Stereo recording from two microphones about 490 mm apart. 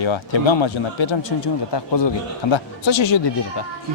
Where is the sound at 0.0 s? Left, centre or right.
Left.